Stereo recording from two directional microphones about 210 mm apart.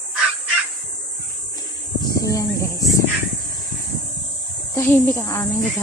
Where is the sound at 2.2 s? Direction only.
15° left (ahead or behind).